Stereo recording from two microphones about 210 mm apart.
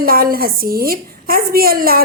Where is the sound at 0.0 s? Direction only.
45° right (ahead or behind).